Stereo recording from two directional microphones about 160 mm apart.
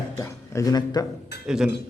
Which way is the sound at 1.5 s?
5° right (ahead or behind).